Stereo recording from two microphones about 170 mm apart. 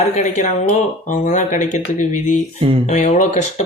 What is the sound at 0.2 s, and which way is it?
Speech, 40° left (ahead or behind).